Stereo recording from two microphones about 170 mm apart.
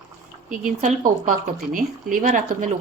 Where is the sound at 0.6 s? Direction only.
50° right (ahead or behind).